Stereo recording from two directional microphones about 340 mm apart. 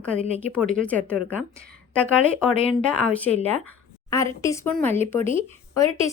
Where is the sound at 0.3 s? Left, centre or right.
Centre.